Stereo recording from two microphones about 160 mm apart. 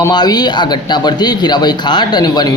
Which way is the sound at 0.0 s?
25° left (ahead or behind).